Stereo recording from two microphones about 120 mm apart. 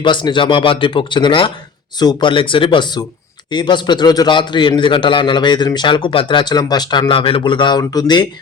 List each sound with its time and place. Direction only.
0.0 s a man's voice: 40° left (ahead or behind)
7.1 s a man's voice: 50° left (ahead or behind)